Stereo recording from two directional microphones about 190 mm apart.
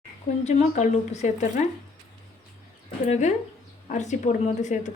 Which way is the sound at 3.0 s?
40° left (ahead or behind).